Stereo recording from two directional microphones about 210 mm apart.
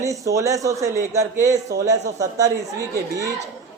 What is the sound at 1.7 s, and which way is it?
Speech, 45° right (ahead or behind).